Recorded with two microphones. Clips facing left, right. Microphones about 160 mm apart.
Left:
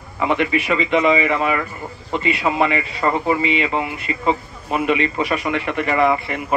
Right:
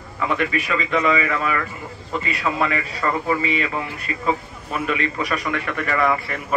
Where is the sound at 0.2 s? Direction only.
25° left (ahead or behind).